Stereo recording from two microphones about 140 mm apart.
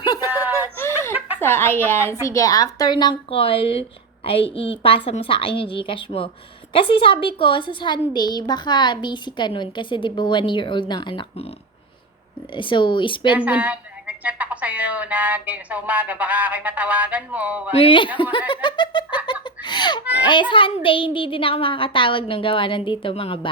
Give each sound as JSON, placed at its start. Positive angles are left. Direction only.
{"t": 0.0, "sound": "a sound", "side_deg": 30}
{"t": 0.3, "sound": "a sound", "side_deg": -15}
{"t": 1.4, "sound": "a woman's voice", "side_deg": 15}
{"t": 12.5, "sound": "a woman's voice", "side_deg": 35}
{"t": 13.3, "sound": "speech", "side_deg": -10}
{"t": 17.7, "sound": "a woman's voice", "side_deg": 40}